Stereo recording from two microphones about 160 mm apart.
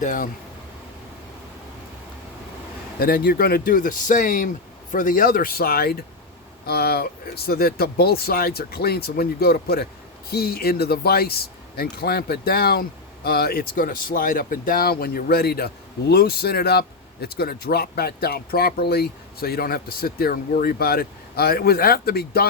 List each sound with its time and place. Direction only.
0.0 s speech: 55° left (ahead or behind)
3.0 s speech: 65° left (ahead or behind)